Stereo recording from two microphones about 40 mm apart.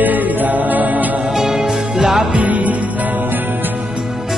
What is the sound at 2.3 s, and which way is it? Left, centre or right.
Music, right.